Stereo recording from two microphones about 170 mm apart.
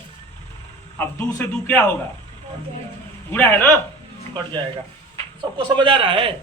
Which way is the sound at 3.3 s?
10° left (ahead or behind).